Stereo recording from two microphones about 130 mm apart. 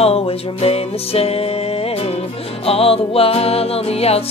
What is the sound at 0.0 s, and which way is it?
Music, 50° left (ahead or behind).